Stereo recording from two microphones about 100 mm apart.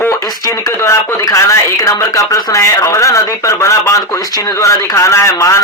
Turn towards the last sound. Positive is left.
turn(degrees=30)  # may be behind; listen again after turning